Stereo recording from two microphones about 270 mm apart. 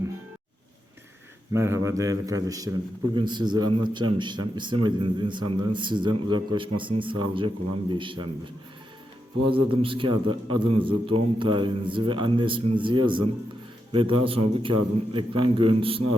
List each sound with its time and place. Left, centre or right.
1.5 s a man's voice: centre
9.5 s a man's voice: centre